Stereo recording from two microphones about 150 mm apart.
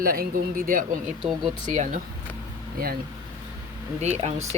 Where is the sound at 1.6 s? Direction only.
55° right (ahead or behind).